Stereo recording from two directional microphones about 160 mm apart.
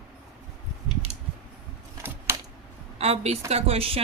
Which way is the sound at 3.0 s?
40° right (ahead or behind).